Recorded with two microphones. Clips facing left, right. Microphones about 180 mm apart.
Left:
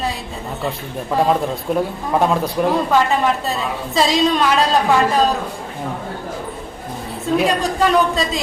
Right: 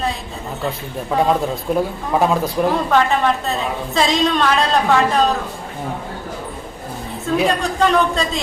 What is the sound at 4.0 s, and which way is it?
Speech, 5° left (ahead or behind).